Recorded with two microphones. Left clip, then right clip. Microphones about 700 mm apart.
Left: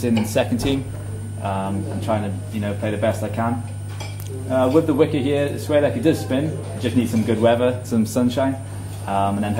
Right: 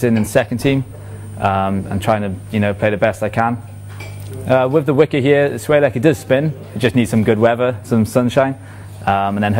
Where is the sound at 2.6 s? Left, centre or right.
Right.